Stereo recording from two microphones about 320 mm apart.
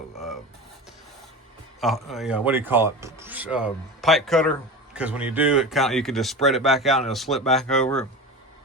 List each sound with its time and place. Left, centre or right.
1.8 s speech: centre